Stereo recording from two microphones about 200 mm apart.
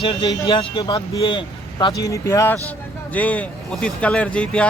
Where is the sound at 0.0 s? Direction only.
25° left (ahead or behind).